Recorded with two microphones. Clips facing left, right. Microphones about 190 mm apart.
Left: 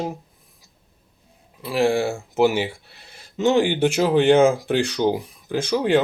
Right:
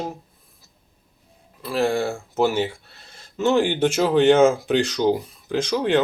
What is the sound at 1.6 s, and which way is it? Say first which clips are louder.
Speech: left 2 dB; 15° left (ahead or behind).